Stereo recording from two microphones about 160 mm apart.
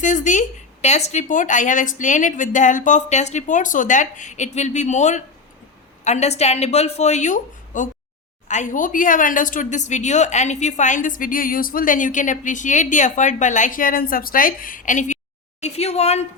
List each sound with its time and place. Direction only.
0.0 s a woman's voice: 50° left (ahead or behind)